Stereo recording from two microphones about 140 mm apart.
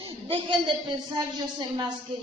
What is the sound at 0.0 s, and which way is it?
A man's voice, 40° right (ahead or behind).